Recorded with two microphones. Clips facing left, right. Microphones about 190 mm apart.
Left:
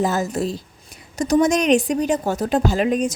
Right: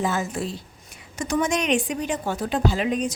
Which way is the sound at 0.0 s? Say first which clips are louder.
Left 5 dB; 40° left (ahead or behind).